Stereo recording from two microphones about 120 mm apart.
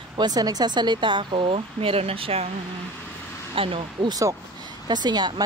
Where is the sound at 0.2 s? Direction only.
30° right (ahead or behind); by 2.4 s 55° right (ahead or behind).